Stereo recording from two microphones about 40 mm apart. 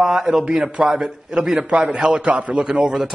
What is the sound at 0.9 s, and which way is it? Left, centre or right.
A man's voice, right.